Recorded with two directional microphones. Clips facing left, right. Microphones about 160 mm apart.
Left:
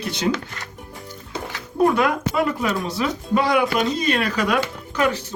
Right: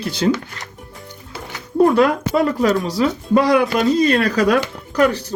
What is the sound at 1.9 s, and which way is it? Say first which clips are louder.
Speech: right 5 dB; 35° right (ahead or behind).